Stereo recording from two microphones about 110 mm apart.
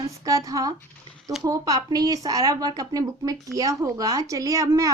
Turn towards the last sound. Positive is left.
turn(degrees=-30)  # may be behind; listen again after turning